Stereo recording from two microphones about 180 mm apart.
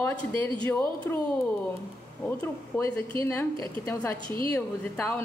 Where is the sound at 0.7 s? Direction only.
10° left (ahead or behind).